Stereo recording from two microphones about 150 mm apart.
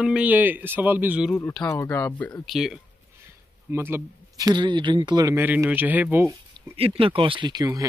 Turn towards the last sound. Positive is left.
turn(degrees=-25)  # may be behind; listen again after turning